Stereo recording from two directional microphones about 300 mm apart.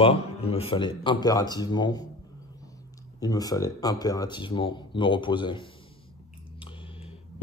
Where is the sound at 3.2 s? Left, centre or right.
Centre.